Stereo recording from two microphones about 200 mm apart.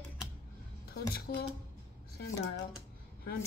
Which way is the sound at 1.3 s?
55° left (ahead or behind).